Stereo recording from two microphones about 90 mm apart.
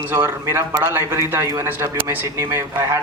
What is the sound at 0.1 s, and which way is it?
A man's voice, 30° right (ahead or behind).